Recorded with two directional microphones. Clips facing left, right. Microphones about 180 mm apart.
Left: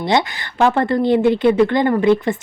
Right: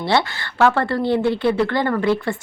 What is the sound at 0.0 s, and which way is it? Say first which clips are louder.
Speech: left 2 dB; 15° left (ahead or behind).